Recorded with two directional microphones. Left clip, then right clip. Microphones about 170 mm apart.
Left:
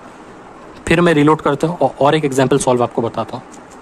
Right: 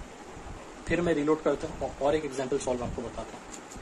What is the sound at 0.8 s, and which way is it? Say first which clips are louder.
A man's voice: left 15 dB; 70° left (ahead or behind).